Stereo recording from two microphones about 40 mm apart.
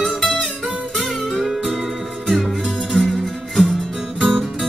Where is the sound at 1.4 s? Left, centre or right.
Centre.